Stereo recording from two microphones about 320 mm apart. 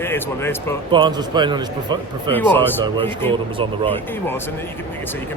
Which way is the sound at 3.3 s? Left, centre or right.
Centre.